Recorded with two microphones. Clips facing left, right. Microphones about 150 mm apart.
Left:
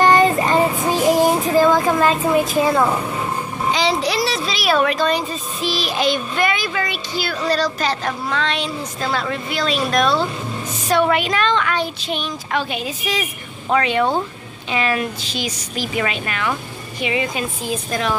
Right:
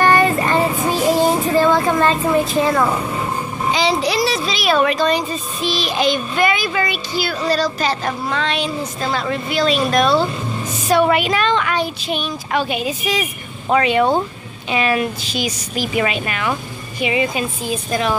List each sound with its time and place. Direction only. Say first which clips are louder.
0.0 s child singing: left 1 dB; 20° left (ahead or behind)
3.7 s a child's voice: right 2 dB; centre (ahead or behind)